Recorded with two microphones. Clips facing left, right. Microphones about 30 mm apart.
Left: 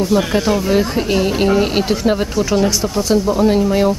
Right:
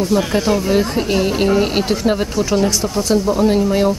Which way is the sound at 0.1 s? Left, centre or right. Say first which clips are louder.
Even; centre.